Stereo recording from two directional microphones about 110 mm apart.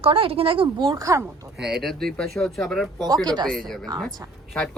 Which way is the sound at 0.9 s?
30° right (ahead or behind).